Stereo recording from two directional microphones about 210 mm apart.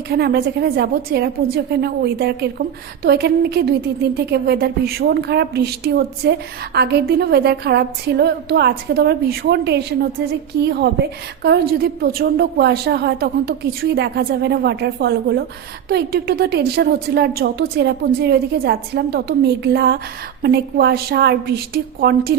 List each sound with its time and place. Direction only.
0.1 s a woman's voice: 50° right (ahead or behind)